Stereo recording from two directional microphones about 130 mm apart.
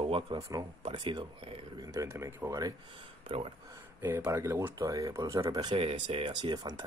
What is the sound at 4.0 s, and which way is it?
Speech, 15° right (ahead or behind).